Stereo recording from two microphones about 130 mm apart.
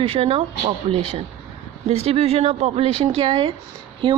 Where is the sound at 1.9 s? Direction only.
55° right (ahead or behind).